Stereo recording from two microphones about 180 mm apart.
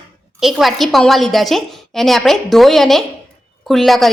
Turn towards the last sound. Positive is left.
turn(degrees=0)  # may be behind; listen again after turning